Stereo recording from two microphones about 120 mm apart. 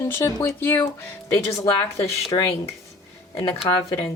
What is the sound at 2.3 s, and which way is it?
Dishes, 40° left (ahead or behind).